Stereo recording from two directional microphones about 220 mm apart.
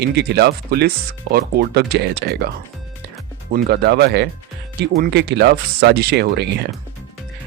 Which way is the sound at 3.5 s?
45° right (ahead or behind).